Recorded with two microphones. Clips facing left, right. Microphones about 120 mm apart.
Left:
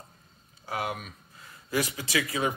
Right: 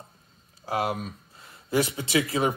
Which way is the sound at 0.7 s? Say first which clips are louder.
Right 5 dB; 35° right (ahead or behind).